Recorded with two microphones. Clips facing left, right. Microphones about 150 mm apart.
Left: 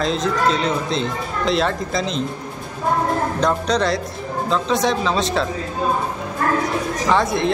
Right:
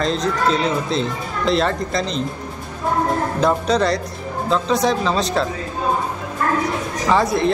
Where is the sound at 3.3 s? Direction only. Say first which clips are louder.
Right 4 dB; 5° right (ahead or behind).